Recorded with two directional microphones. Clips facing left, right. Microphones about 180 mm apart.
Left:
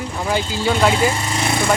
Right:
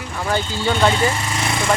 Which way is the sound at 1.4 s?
30° left (ahead or behind).